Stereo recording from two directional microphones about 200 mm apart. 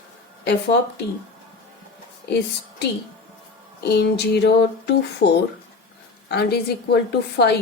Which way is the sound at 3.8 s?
55° left (ahead or behind).